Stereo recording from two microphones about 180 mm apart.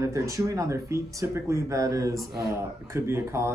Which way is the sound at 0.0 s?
15° right (ahead or behind).